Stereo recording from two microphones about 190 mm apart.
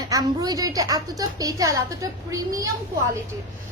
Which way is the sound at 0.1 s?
20° right (ahead or behind).